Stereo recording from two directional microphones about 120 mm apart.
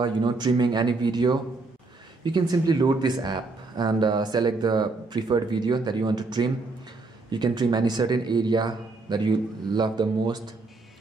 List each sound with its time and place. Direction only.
0.0 s speech: 40° right (ahead or behind)